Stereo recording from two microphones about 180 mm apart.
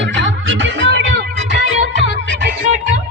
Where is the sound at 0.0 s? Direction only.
90° right.